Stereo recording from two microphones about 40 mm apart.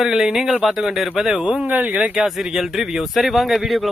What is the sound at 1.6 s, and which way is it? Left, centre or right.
Speech, right.